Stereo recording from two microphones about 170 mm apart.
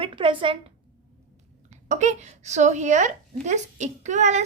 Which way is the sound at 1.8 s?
45° right (ahead or behind).